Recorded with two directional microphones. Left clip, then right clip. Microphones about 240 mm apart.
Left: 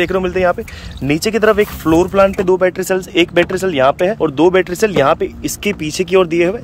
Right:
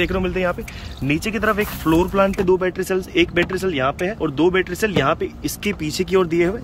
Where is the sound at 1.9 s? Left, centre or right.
Centre.